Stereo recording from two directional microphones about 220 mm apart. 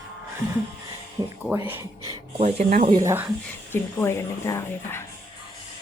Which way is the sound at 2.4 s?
30° right (ahead or behind).